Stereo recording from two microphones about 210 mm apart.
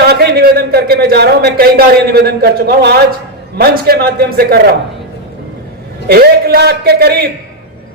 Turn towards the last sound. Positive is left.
turn(degrees=-50)  # may be behind; listen again after turning